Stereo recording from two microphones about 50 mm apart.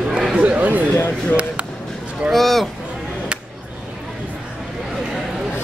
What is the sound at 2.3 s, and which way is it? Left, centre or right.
Speech, centre.